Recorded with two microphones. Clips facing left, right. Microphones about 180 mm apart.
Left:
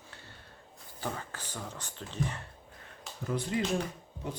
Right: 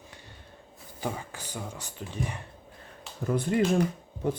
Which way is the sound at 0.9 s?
10° right (ahead or behind).